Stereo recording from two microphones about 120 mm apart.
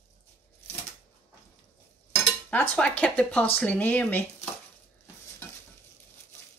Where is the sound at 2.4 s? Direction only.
10° left (ahead or behind).